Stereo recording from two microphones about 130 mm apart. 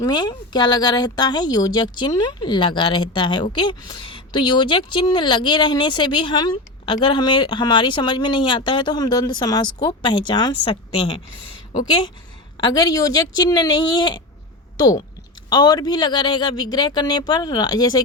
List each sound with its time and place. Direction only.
0.0 s speech: 35° left (ahead or behind)
12.5 s speech: 35° left (ahead or behind)